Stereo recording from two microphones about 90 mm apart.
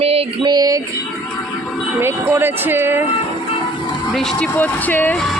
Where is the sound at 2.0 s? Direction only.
25° right (ahead or behind).